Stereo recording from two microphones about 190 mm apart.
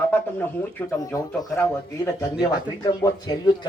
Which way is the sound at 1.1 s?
15° left (ahead or behind).